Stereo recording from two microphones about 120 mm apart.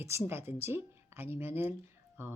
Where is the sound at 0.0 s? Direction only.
20° right (ahead or behind).